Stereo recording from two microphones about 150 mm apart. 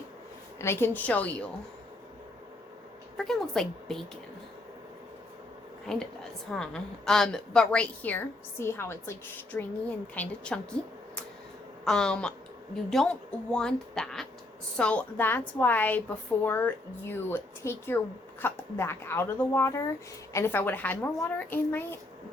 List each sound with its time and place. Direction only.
0.6 s a woman's voice: 15° left (ahead or behind)
3.2 s speech: 5° left (ahead or behind)
5.8 s a woman's voice: 5° left (ahead or behind)
11.9 s a woman's voice: 5° left (ahead or behind)